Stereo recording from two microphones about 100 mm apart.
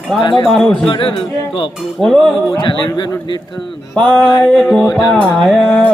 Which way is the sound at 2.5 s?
50° left (ahead or behind).